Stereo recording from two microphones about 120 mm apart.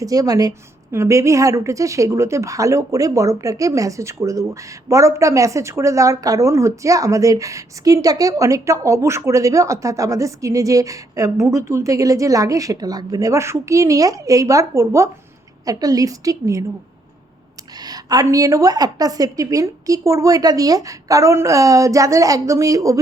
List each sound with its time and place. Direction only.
0.0 s speech: 30° right (ahead or behind)
17.7 s speech: 30° right (ahead or behind)